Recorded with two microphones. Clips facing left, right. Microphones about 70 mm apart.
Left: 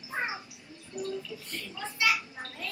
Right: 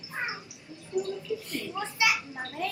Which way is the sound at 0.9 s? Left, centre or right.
Centre.